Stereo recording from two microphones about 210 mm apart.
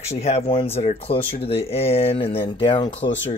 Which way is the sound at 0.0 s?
30° left (ahead or behind).